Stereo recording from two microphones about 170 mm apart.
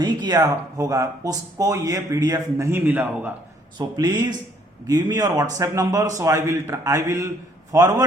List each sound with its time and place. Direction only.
0.0 s speech: 25° right (ahead or behind)
3.8 s speech: 25° right (ahead or behind)